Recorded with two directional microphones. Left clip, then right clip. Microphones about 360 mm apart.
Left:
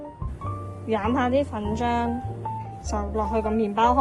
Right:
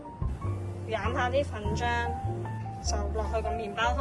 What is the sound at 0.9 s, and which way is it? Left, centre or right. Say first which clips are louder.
A woman's voice: left 6 dB; centre.